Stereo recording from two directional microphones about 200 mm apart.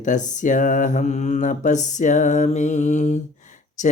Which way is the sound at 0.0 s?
40° left (ahead or behind).